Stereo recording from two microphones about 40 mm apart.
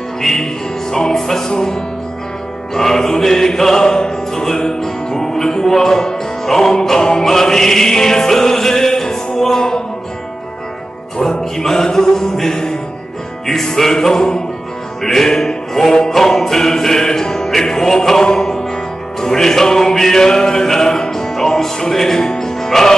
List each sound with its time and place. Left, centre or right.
0.2 s music: centre
11.1 s music: centre